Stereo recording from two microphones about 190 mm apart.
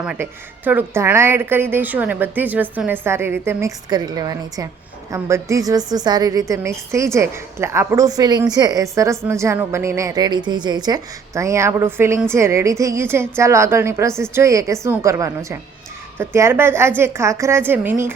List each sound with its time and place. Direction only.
0.0 s a woman's voice: 10° right (ahead or behind)